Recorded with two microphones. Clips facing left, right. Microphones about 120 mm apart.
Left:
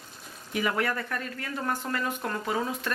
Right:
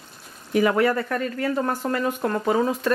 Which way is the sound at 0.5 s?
45° right (ahead or behind).